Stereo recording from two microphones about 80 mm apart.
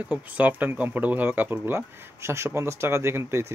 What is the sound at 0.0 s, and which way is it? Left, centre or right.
Speech, centre.